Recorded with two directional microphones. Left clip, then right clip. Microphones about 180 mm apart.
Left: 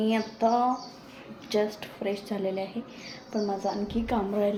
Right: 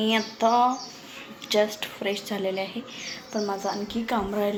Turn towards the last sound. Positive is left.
turn(degrees=5)  # may be behind; listen again after turning